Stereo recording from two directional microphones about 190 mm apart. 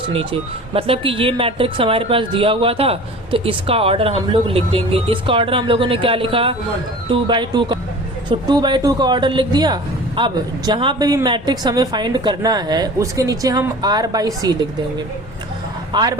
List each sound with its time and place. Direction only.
0.1 s speech: 30° right (ahead or behind)
15.9 s speech: 25° right (ahead or behind)